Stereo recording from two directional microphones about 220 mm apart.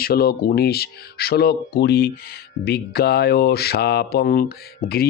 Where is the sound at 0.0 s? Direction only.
45° left (ahead or behind).